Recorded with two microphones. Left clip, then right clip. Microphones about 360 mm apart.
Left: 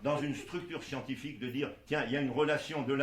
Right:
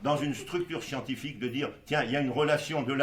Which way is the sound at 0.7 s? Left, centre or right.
Right.